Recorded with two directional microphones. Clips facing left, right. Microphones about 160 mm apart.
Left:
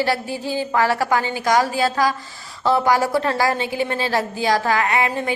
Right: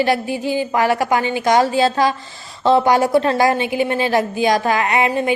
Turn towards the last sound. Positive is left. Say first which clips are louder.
# right 4 dB
turn(degrees=-20)  # may be behind; listen again after turning